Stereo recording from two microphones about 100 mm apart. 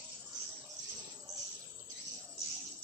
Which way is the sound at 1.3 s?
35° right (ahead or behind).